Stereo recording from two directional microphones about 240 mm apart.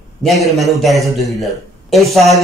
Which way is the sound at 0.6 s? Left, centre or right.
Centre.